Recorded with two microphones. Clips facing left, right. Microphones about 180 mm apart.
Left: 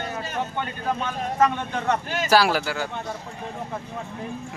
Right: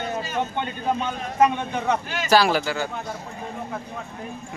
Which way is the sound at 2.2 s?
5° left (ahead or behind).